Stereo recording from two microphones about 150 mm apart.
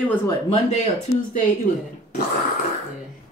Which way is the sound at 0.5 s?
45° left (ahead or behind).